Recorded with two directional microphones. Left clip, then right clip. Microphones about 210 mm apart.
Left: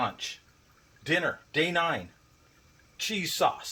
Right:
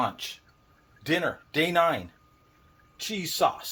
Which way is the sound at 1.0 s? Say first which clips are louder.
Right 1 dB; 35° right (ahead or behind).